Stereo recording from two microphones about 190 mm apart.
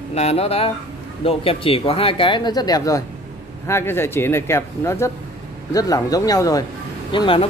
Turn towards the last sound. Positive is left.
turn(degrees=25)  # may be behind; listen again after turning